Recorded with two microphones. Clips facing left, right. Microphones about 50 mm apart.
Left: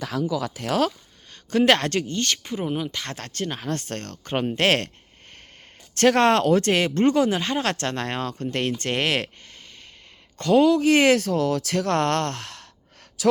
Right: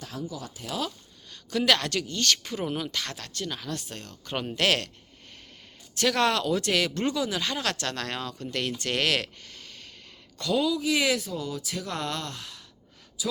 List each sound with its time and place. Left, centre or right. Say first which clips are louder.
0.1 s speech: left 11 dB; left
1.3 s speech: left 6 dB; left
2.6 s speech: left 5 dB; centre
2.9 s speech: left 1 dB; left
3.2 s speech: left 5 dB; left
4.5 s speech: left 3 dB; left
6.0 s speech: left 7 dB; left
10.3 s speech: left 9 dB; left
13.2 s speech: left 12 dB; left